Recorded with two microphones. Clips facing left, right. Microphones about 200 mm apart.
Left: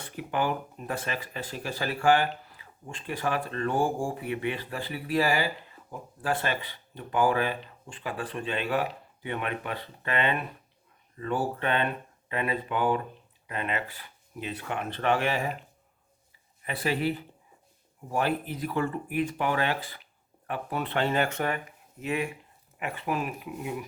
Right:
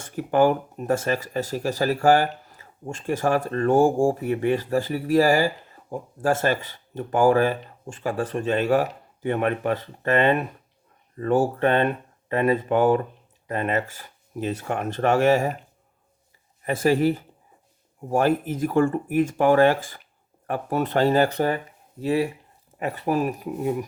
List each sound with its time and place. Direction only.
0.0 s speech: 45° right (ahead or behind)
16.6 s speech: 45° right (ahead or behind)